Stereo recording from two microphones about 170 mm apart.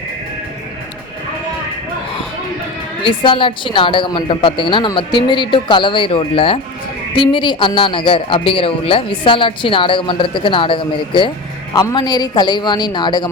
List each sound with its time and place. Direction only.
3.0 s a man's voice: 30° left (ahead or behind)